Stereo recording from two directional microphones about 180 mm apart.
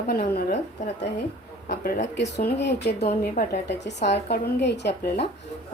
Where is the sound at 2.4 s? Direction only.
70° left (ahead or behind).